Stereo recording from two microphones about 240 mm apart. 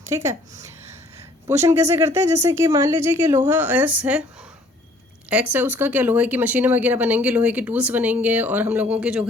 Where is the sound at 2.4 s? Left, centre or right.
Centre.